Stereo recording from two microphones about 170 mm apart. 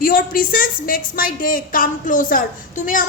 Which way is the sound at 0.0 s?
55° left (ahead or behind).